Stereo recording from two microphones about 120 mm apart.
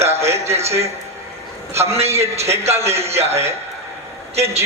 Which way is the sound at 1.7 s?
60° right (ahead or behind).